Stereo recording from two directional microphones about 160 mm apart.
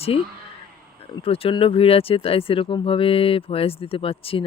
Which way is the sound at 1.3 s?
35° left (ahead or behind).